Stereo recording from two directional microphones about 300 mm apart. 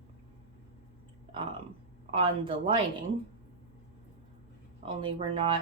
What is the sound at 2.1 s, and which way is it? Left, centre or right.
Speech, centre.